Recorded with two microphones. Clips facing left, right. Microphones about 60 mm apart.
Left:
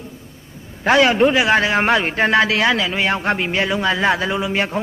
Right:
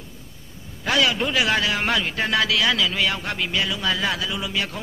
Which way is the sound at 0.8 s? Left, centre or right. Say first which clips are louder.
Left 8 dB; left.